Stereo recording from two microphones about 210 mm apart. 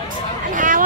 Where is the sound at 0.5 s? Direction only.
40° right (ahead or behind).